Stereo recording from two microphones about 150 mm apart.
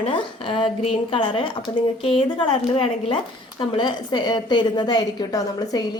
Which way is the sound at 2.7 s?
35° left (ahead or behind).